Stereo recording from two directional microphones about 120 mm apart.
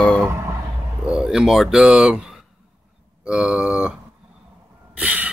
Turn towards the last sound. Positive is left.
turn(degrees=-10)  # may be behind; listen again after turning